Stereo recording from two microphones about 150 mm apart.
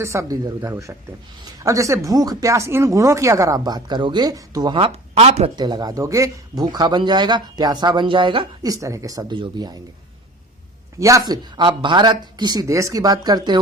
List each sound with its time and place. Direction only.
0.0 s a man's voice: 20° right (ahead or behind)
5.1 s speech: 45° right (ahead or behind)
5.5 s a man's voice: 30° right (ahead or behind)
11.0 s a man's voice: 25° right (ahead or behind)